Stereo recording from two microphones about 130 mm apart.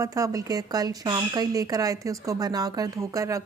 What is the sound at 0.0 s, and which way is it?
Speech, 25° right (ahead or behind).